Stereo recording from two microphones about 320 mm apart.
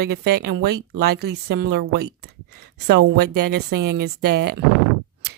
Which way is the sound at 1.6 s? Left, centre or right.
Right.